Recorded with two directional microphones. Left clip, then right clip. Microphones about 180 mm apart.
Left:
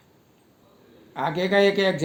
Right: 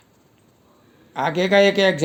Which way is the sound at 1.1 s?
40° right (ahead or behind).